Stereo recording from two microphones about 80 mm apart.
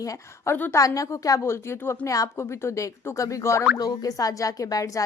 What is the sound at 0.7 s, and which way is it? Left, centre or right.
Speech, left.